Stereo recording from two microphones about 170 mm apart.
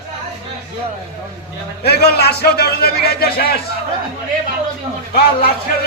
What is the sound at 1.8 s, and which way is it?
A man's voice, 70° left (ahead or behind).